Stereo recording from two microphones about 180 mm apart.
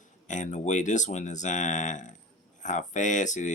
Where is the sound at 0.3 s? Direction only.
45° left (ahead or behind).